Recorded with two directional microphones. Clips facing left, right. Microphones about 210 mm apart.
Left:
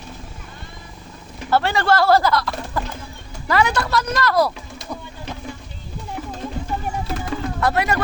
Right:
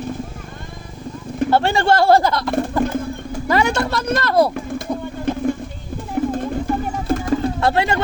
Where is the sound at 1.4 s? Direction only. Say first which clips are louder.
Right 2 dB; 25° right (ahead or behind).